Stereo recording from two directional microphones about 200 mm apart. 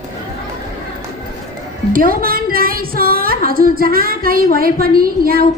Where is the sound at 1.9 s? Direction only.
45° right (ahead or behind).